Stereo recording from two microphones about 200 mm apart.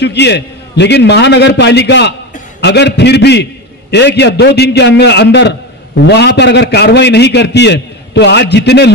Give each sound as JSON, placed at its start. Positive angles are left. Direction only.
{"t": 0.0, "sound": "a man's voice", "side_deg": 55}